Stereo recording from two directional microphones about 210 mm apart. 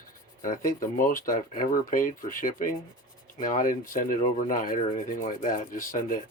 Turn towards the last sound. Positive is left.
turn(degrees=40)  # may be behind; listen again after turning